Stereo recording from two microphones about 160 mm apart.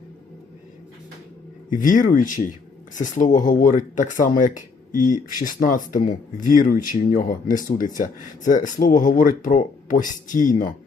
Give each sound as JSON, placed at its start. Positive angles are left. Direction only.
{"t": 1.7, "sound": "speech", "side_deg": 55}